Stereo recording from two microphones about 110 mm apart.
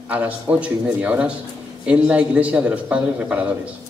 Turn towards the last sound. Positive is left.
turn(degrees=-15)  # may be behind; listen again after turning